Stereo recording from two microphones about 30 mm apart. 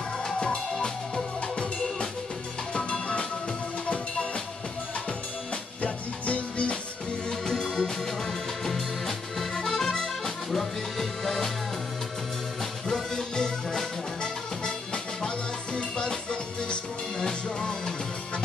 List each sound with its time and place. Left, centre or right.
0.2 s music: left
5.8 s music: left
7.2 s music: left
9.7 s accordion: centre
12.8 s music: centre
15.2 s music: left